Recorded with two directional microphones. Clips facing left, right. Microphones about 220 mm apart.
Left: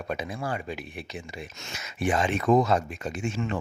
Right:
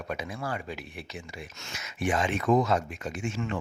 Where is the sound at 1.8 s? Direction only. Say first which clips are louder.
Left 2 dB; 35° left (ahead or behind).